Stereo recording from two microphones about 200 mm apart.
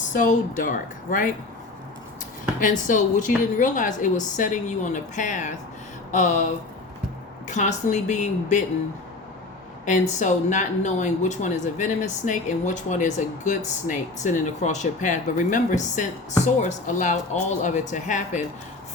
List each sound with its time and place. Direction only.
0.1 s speech: 40° left (ahead or behind)
2.6 s speech: 40° left (ahead or behind)
9.8 s speech: 35° left (ahead or behind)